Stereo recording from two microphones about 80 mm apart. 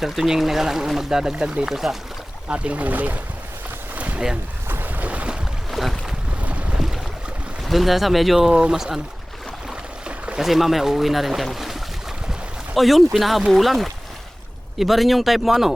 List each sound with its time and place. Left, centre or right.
0.0 s speech: centre
2.5 s speech: centre
3.9 s boat: centre
5.7 s boat: centre
6.4 s boat: centre
6.7 s boat: centre
7.6 s speech: centre
10.1 s boat: centre
10.4 s speech: centre
12.3 s boat: centre
13.1 s speech: centre